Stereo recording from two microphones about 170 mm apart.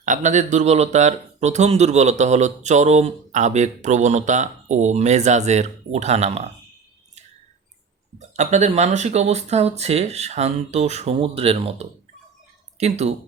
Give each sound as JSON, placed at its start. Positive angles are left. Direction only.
{"t": 0.0, "sound": "speech", "side_deg": -45}
{"t": 8.2, "sound": "speech", "side_deg": -45}